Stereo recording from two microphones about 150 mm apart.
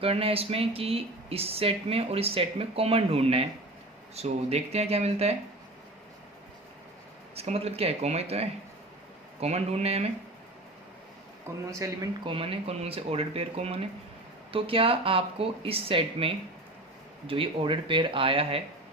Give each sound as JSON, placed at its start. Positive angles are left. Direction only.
{"t": 0.0, "sound": "speech", "side_deg": -40}
{"t": 7.3, "sound": "speech", "side_deg": -40}
{"t": 11.5, "sound": "speech", "side_deg": -15}
{"t": 12.2, "sound": "speech", "side_deg": -35}